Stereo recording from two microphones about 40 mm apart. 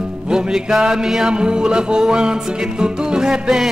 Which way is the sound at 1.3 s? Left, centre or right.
Right.